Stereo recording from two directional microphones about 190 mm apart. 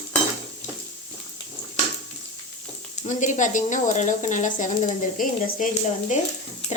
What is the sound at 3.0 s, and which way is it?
A woman's voice, 40° left (ahead or behind).